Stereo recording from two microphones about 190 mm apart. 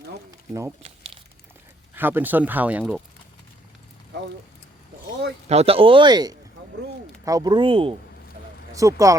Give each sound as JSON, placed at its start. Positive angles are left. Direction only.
{"t": 0.8, "sound": "crumpling", "side_deg": -30}
{"t": 2.0, "sound": "speech", "side_deg": -10}
{"t": 5.5, "sound": "speech", "side_deg": -30}
{"t": 8.7, "sound": "speech", "side_deg": -15}